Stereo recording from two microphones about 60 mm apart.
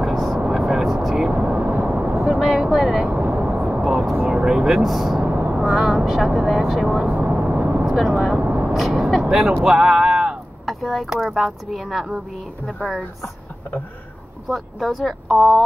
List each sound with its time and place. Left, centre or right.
0.0 s vehicle: centre
1.3 s vehicle: centre
2.2 s vehicle: centre
3.1 s vehicle: centre
5.2 s vehicle: right
5.6 s speech: centre
7.2 s vehicle: centre
8.4 s vehicle: centre
8.7 s speech: centre
9.7 s a sound: centre
10.6 s speech: centre
14.5 s speech: centre